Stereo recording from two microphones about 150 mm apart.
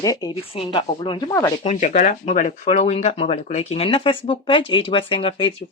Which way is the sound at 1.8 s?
55° left (ahead or behind).